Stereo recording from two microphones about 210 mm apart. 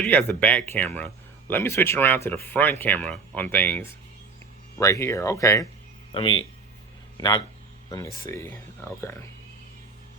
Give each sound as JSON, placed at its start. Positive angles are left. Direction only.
{"t": 0.0, "sound": "speech", "side_deg": 5}
{"t": 6.1, "sound": "a man's voice", "side_deg": 25}